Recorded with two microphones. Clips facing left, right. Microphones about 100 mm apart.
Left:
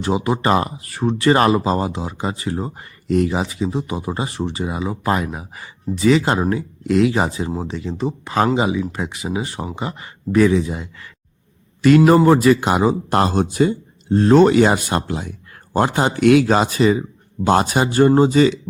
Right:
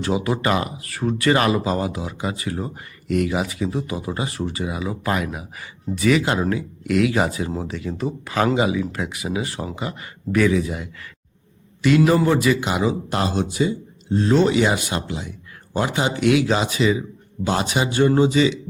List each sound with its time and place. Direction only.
0.0 s speech: 30° left (ahead or behind)
11.8 s speech: 45° left (ahead or behind)